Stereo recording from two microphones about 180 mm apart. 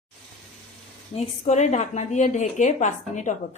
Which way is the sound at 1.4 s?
40° left (ahead or behind).